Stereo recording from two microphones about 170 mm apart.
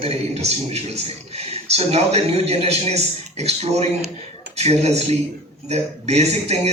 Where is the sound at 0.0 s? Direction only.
35° right (ahead or behind).